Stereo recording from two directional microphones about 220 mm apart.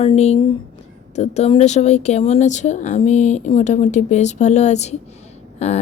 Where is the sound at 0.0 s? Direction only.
30° left (ahead or behind).